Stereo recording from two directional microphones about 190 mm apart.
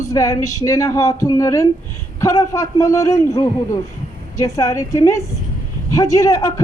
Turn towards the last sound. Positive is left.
turn(degrees=20)  # may be behind; listen again after turning